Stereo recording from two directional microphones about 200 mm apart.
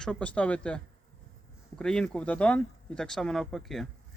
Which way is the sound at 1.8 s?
5° left (ahead or behind).